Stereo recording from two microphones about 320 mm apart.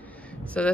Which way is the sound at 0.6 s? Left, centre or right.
Centre.